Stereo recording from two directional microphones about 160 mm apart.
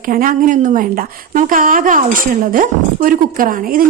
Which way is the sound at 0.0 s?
60° right (ahead or behind).